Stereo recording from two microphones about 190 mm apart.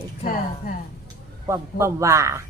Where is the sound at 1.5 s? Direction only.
15° right (ahead or behind).